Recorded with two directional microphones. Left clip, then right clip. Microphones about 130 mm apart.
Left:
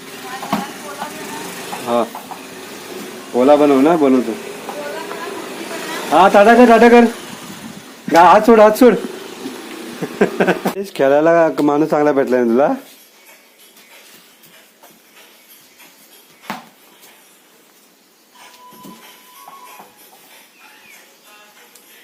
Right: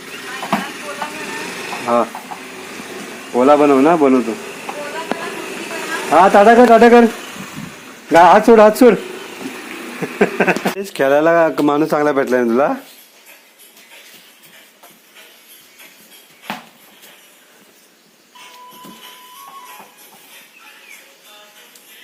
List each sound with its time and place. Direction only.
1.9 s speech: 20° right (ahead or behind)
3.3 s a man's voice: 15° right (ahead or behind)
6.1 s speech: 40° right (ahead or behind)
8.1 s speech: 55° right (ahead or behind)
10.0 s a sound: 10° right (ahead or behind)
10.8 s speech: 15° left (ahead or behind)
11.6 s speech: centre (ahead or behind)